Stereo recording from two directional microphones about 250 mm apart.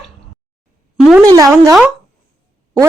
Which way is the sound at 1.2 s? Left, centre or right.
Centre.